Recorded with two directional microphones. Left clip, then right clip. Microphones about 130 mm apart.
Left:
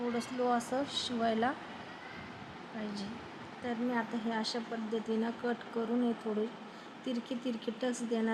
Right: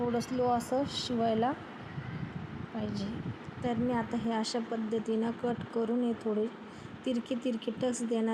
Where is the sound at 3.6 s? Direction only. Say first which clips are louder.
Right 3 dB; 15° right (ahead or behind).